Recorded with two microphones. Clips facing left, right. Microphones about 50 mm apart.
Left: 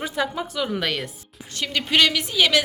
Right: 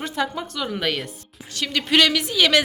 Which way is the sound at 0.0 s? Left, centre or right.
Centre.